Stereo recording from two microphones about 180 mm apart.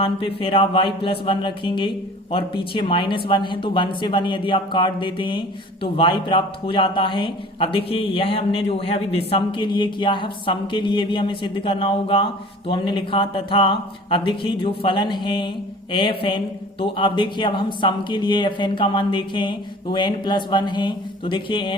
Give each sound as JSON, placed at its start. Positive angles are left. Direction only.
{"t": 0.0, "sound": "speech", "side_deg": 30}